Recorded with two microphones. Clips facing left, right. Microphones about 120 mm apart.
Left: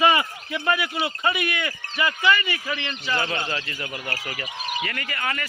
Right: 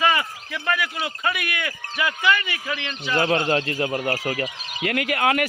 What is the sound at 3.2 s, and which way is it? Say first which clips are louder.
Speech: right 12 dB; 50° right (ahead or behind).